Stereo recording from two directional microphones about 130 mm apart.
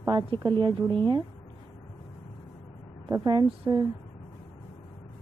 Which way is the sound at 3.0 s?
35° right (ahead or behind).